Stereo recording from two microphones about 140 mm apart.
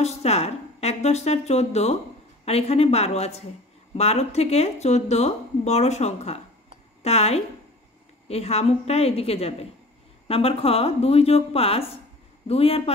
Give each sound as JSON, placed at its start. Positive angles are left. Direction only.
{"t": 0.0, "sound": "speech", "side_deg": 50}